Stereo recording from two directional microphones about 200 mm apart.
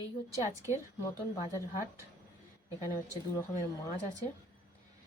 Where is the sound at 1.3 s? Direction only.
15° left (ahead or behind).